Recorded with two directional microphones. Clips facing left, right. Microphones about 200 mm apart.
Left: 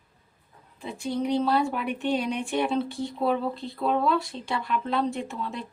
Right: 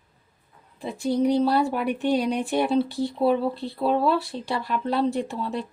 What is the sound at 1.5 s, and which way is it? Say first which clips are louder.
Speech: right 3 dB; 35° right (ahead or behind).